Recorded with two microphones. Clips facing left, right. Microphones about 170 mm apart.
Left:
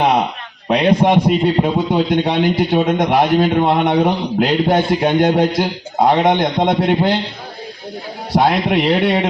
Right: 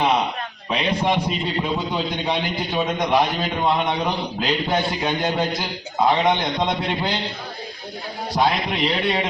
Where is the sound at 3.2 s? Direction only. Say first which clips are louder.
Left 8 dB; 55° left (ahead or behind).